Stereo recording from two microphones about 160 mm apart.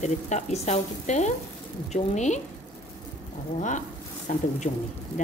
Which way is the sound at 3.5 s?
50° left (ahead or behind).